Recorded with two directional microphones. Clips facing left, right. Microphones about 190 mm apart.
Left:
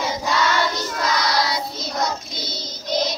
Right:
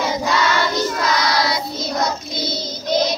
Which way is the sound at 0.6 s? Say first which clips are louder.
Right 3 dB; 75° right (ahead or behind).